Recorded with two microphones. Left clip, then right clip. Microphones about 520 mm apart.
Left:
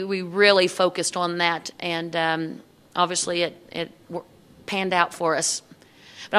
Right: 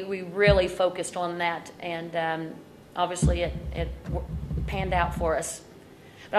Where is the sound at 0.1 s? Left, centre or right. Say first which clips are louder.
Left 4 dB; left.